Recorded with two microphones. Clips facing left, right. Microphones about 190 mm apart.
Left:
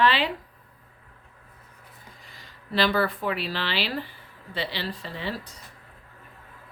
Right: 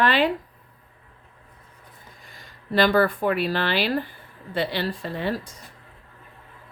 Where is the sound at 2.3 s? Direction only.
50° right (ahead or behind).